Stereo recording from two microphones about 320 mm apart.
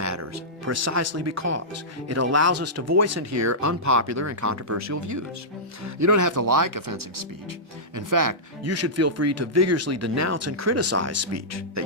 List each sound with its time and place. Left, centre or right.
0.0 s music: right
2.0 s speech: right
7.9 s speech: right
8.6 s speech: right